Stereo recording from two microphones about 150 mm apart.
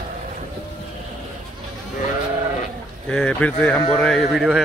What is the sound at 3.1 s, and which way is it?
Speech, 5° left (ahead or behind).